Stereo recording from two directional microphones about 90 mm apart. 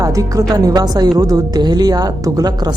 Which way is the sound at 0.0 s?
40° right (ahead or behind).